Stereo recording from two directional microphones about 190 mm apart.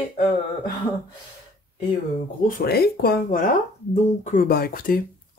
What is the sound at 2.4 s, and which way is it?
Speech, 50° left (ahead or behind).